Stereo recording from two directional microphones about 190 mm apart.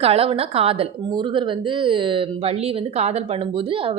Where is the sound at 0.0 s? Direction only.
30° right (ahead or behind).